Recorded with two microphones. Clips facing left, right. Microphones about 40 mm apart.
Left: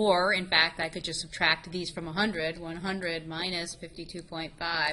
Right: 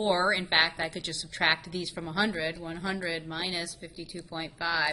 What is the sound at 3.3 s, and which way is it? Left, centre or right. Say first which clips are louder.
A woman's voice: even; centre.